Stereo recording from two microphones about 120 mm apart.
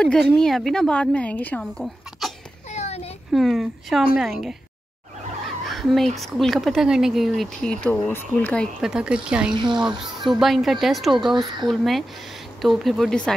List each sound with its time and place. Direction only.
0.4 s speech: centre (ahead or behind)
1.8 s a sound: centre (ahead or behind)
2.7 s a sound: 65° left (ahead or behind)
3.3 s speech: centre (ahead or behind)
5.7 s speech: centre (ahead or behind)
8.8 s speech: 5° right (ahead or behind)